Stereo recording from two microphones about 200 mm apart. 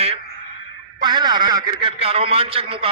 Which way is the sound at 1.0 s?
20° right (ahead or behind).